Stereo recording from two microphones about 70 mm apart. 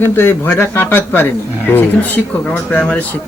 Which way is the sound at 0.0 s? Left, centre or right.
Left.